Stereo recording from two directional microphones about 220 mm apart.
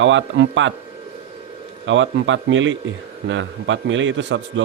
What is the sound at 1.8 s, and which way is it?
A man's voice, 60° right (ahead or behind).